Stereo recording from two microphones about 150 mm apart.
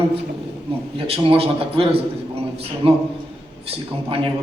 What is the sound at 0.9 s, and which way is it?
A man's voice, 40° right (ahead or behind).